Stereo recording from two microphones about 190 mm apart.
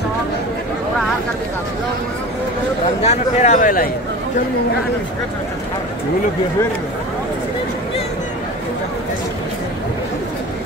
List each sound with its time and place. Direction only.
3.0 s speech: 35° left (ahead or behind)